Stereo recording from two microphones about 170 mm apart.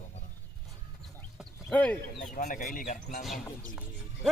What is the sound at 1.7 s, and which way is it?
Speech, 10° left (ahead or behind).